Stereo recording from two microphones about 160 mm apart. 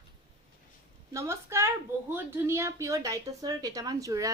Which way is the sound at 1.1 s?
15° right (ahead or behind).